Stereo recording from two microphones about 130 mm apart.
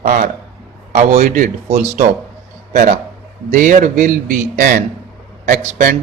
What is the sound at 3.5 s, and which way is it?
A man's voice, 90° right.